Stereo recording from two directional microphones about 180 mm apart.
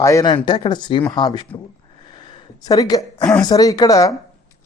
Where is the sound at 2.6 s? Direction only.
20° left (ahead or behind).